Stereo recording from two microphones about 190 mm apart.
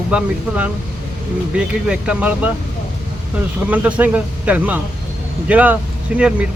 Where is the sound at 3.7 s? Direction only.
10° right (ahead or behind).